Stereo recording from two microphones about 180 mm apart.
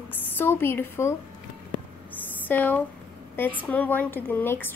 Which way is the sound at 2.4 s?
10° left (ahead or behind).